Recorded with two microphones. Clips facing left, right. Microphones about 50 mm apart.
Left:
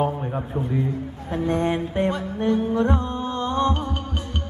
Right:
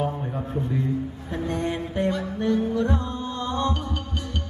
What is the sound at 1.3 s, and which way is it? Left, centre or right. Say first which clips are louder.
Music: left 5 dB; left.